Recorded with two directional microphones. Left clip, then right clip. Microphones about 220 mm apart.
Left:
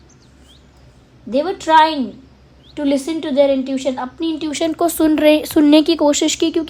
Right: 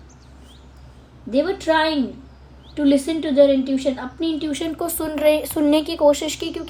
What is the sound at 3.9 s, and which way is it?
A woman's voice, 25° left (ahead or behind).